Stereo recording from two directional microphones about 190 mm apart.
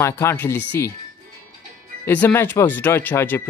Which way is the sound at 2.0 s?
10° left (ahead or behind).